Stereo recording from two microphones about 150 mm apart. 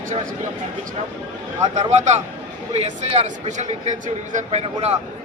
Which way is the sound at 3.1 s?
50° right (ahead or behind).